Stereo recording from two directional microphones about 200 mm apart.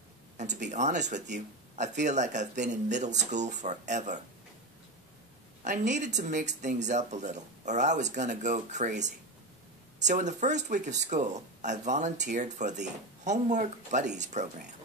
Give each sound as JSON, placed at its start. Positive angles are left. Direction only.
{"t": 0.7, "sound": "speech", "side_deg": -35}
{"t": 5.6, "sound": "speech", "side_deg": -35}
{"t": 9.9, "sound": "speech", "side_deg": -35}